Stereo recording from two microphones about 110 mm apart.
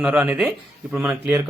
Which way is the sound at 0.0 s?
15° right (ahead or behind).